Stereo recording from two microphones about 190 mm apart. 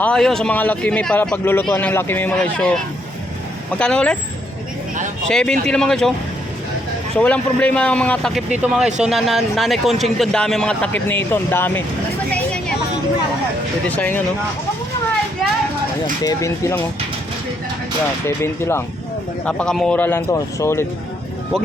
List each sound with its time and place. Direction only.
0.0 s a man's voice: 5° left (ahead or behind)
3.8 s speech: 5° left (ahead or behind)
5.3 s speech: 5° left (ahead or behind)
7.2 s a man's voice: 5° left (ahead or behind)
12.3 s vehicle: 5° left (ahead or behind)
13.9 s a man's voice: 10° left (ahead or behind)
16.2 s a man's voice: 15° left (ahead or behind)
18.3 s a man's voice: 15° left (ahead or behind)